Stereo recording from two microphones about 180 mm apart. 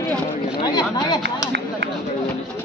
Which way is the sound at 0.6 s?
25° left (ahead or behind).